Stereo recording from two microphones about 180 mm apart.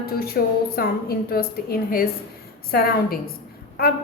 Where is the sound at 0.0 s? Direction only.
60° left (ahead or behind).